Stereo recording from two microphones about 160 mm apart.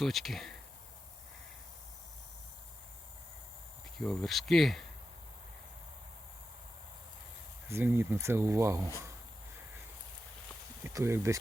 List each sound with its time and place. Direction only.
0.0 s speech: centre (ahead or behind)
3.9 s speech: centre (ahead or behind)
7.7 s speech: 15° right (ahead or behind)
10.8 s speech: 15° right (ahead or behind)